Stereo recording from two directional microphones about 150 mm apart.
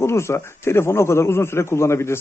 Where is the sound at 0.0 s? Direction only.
20° left (ahead or behind).